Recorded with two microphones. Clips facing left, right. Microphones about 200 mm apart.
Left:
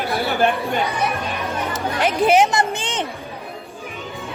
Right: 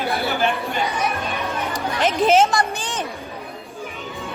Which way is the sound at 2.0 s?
10° left (ahead or behind).